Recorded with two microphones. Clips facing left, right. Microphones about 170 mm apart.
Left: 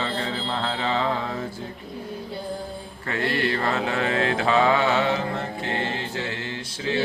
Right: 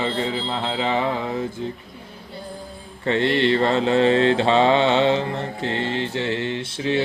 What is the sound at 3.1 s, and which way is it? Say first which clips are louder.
Mantra: right 6 dB; 25° right (ahead or behind).